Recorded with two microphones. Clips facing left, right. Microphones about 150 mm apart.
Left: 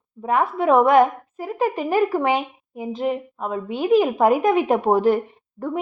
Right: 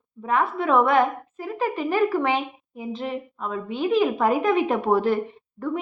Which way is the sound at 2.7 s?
45° left (ahead or behind).